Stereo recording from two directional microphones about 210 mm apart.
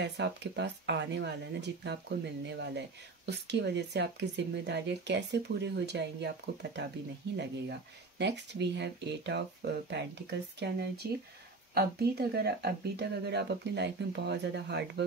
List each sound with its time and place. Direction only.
0.0 s speech: 55° right (ahead or behind)